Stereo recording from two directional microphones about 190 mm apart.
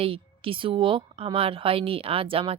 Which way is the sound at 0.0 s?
30° right (ahead or behind).